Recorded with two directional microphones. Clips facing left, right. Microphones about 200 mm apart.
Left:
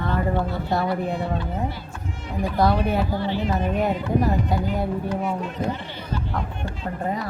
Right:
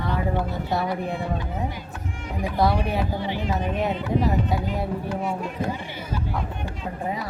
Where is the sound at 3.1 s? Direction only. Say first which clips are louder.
Left 3 dB; 15° right (ahead or behind).